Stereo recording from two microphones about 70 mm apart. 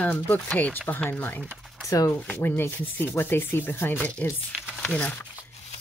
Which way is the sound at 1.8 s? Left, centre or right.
Left.